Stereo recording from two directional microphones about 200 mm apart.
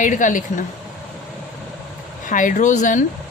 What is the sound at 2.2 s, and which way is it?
Speech, 40° left (ahead or behind).